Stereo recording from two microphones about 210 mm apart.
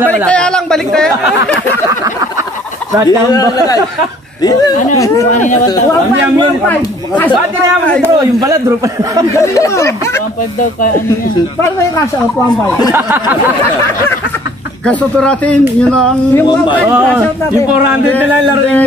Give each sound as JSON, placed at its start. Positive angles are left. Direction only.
{"t": 0.3, "sound": "speech", "side_deg": 5}
{"t": 3.1, "sound": "speech", "side_deg": 15}
{"t": 6.7, "sound": "speech", "side_deg": 10}
{"t": 8.0, "sound": "a man's voice", "side_deg": -15}
{"t": 9.3, "sound": "speech", "side_deg": 15}
{"t": 12.9, "sound": "a man's voice", "side_deg": -10}
{"t": 14.9, "sound": "speech", "side_deg": 5}